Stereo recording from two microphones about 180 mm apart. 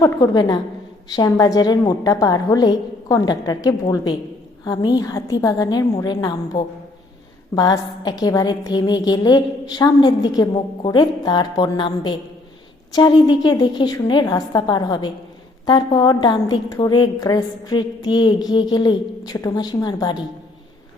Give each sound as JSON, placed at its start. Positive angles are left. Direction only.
{"t": 0.0, "sound": "a woman's voice", "side_deg": 20}